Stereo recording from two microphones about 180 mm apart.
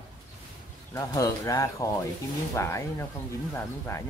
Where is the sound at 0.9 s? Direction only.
15° left (ahead or behind).